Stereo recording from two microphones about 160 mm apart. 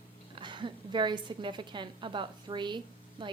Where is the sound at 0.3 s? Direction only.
30° right (ahead or behind).